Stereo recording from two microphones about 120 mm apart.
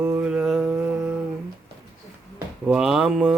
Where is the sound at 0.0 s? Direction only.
15° right (ahead or behind).